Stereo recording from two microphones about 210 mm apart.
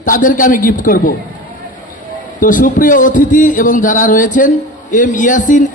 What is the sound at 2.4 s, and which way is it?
A man's voice, 40° left (ahead or behind).